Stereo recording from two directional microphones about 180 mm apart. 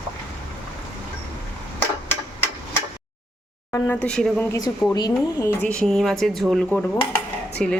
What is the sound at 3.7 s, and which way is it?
Speech, 10° left (ahead or behind).